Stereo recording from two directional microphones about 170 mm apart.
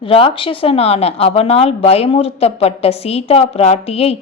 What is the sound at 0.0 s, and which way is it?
A woman's voice, 30° left (ahead or behind).